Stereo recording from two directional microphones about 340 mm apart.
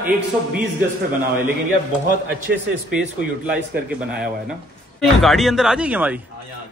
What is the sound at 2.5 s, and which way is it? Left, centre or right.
Speech, right.